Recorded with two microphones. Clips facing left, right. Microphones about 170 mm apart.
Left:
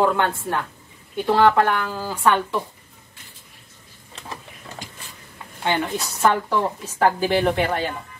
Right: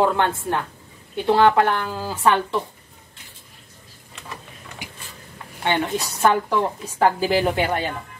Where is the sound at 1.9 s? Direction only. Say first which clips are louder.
Even; 10° right (ahead or behind).